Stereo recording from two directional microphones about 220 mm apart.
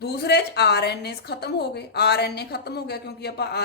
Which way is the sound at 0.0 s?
45° left (ahead or behind).